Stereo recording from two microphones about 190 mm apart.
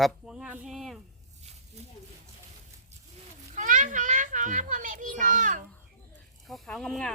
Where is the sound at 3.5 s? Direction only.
45° right (ahead or behind).